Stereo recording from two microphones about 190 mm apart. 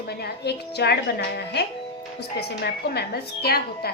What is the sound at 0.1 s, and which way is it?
A woman's voice, 55° left (ahead or behind).